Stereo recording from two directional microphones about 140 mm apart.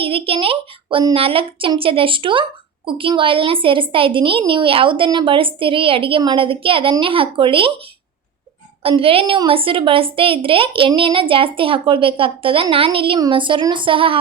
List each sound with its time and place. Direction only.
0.0 s a woman's voice: 40° right (ahead or behind)
8.8 s a woman's voice: 40° right (ahead or behind)